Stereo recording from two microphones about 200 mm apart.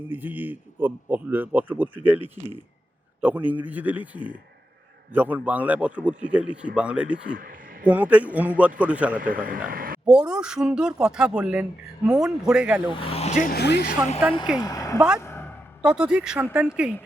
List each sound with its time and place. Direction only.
0.1 s a man's voice: 10° right (ahead or behind)
9.1 s speech: 45° right (ahead or behind)
10.1 s speech: 5° right (ahead or behind)
12.9 s speech: 30° left (ahead or behind); by 14.0 s 55° left (ahead or behind)
14.6 s speech: 15° left (ahead or behind)
14.9 s speech: 5° right (ahead or behind)
15.2 s a sound: 10° left (ahead or behind)
15.8 s speech: 5° right (ahead or behind)